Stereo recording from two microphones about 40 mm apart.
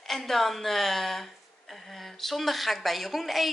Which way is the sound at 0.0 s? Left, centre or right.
Centre.